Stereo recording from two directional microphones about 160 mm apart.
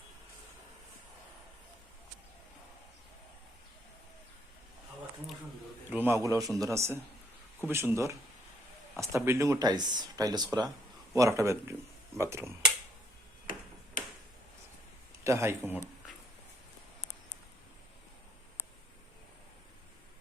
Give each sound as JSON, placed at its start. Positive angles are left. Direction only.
{"t": 5.9, "sound": "a man's voice", "side_deg": -15}
{"t": 15.2, "sound": "speech", "side_deg": -15}